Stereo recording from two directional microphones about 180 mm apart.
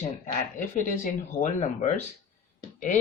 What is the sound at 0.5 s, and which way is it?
Speech, 45° left (ahead or behind).